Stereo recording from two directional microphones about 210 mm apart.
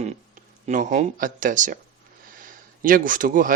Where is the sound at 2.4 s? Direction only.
40° right (ahead or behind).